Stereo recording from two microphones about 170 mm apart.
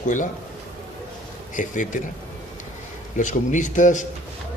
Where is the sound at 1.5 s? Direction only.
50° left (ahead or behind).